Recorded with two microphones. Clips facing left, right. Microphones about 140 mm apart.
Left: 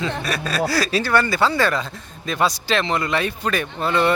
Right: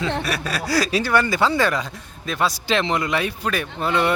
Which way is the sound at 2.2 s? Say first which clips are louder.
Left 2 dB; centre (ahead or behind).